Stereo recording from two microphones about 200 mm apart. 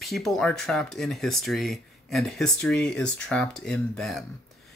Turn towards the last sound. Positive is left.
turn(degrees=0)  # may be behind; listen again after turning